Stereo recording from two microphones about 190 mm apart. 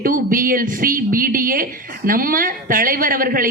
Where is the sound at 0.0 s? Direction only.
45° right (ahead or behind).